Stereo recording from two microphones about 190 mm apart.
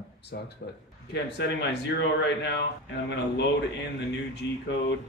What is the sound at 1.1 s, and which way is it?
Speech, 65° left (ahead or behind).